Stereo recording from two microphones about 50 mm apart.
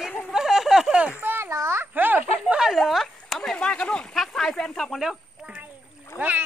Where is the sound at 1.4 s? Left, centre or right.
Right.